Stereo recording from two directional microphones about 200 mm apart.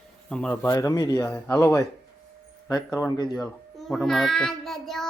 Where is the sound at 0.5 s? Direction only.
15° left (ahead or behind).